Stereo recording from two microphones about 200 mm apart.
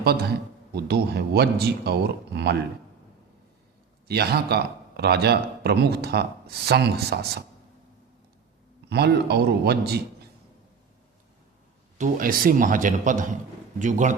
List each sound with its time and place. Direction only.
0.0 s speech: 50° right (ahead or behind)
4.1 s speech: 50° right (ahead or behind)
8.9 s speech: 55° right (ahead or behind)
11.9 s a man's voice: 40° right (ahead or behind)